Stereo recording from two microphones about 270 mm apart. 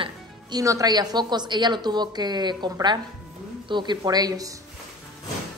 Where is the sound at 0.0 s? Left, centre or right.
Centre.